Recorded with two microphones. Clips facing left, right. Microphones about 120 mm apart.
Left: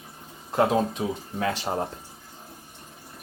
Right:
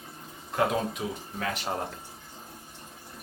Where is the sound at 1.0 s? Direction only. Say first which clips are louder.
Left 5 dB; 30° left (ahead or behind).